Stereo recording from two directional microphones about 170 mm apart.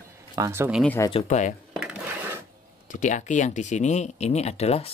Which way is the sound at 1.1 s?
40° left (ahead or behind).